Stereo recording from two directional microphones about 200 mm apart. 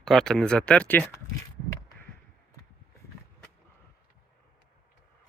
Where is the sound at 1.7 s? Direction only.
15° left (ahead or behind).